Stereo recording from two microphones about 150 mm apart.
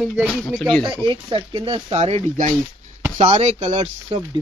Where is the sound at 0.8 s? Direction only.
30° right (ahead or behind).